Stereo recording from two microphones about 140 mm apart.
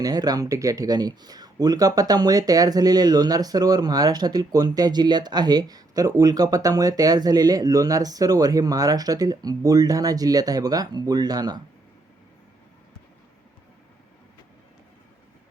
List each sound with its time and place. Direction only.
0.0 s speech: 30° right (ahead or behind)